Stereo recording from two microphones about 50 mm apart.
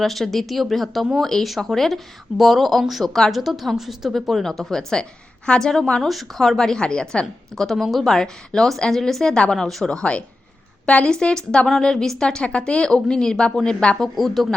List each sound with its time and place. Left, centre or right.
0.0 s a woman's voice: centre
3.3 s a woman's voice: centre
7.5 s a woman's voice: centre
9.9 s a woman's voice: left
14.2 s a woman's voice: centre